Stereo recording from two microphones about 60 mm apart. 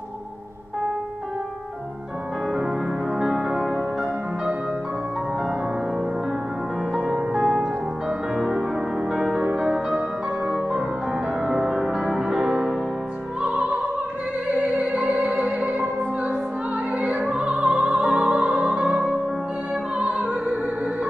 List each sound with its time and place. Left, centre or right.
3.2 s music: centre
6.9 s music: centre
14.5 s opera: centre
16.9 s music: centre
17.6 s opera: centre
20.0 s music: centre